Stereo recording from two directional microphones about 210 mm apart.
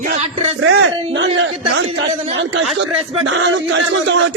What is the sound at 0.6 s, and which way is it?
Speech, 75° right (ahead or behind).